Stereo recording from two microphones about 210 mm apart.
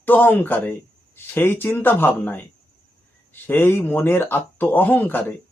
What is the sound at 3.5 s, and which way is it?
Speech, 10° left (ahead or behind).